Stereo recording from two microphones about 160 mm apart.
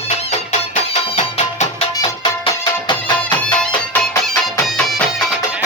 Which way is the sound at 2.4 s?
30° left (ahead or behind).